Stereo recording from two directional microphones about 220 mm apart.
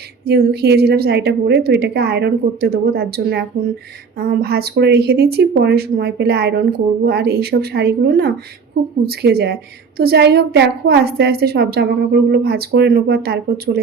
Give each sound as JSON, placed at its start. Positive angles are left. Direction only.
{"t": 0.3, "sound": "speech", "side_deg": -45}